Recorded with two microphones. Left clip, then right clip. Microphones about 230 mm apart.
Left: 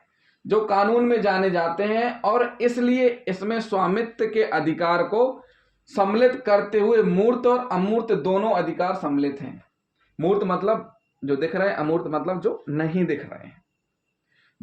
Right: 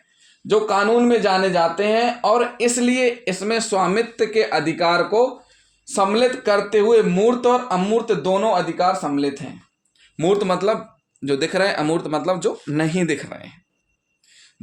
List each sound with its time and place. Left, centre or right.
0.4 s speech: right